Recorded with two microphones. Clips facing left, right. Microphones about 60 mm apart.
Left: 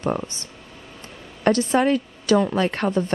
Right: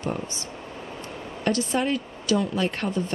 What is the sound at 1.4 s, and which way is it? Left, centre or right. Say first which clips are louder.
A woman's voice: left 6 dB; left.